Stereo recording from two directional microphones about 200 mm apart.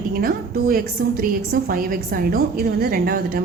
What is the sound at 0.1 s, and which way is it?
A woman's voice, 45° right (ahead or behind).